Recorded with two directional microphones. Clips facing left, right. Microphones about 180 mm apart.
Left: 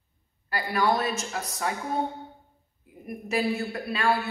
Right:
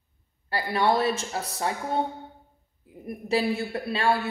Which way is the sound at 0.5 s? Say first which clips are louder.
Right 1 dB; 30° right (ahead or behind).